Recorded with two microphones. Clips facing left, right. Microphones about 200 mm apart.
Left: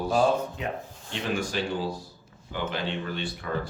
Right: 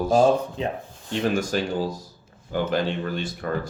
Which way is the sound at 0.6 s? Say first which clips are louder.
Right 5 dB; 30° right (ahead or behind).